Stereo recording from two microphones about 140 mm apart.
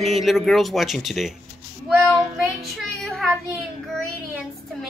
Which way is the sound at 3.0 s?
Centre (ahead or behind).